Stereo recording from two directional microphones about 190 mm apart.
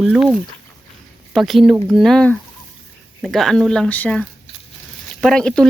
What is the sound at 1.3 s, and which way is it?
Speech, centre (ahead or behind).